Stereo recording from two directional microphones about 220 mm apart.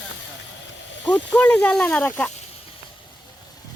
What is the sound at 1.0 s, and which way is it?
Speech, 5° left (ahead or behind).